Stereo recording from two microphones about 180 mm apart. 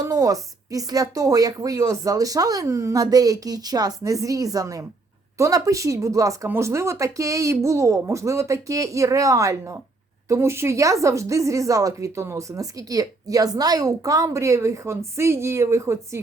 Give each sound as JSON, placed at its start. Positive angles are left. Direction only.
{"t": 0.0, "sound": "speech", "side_deg": -20}